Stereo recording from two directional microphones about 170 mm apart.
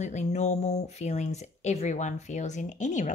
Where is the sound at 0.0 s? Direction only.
40° left (ahead or behind).